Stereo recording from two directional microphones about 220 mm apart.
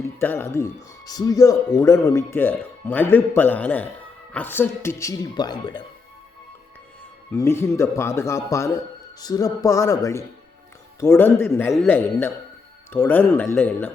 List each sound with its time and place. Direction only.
0.0 s speech: 10° left (ahead or behind)
7.3 s speech: 10° left (ahead or behind)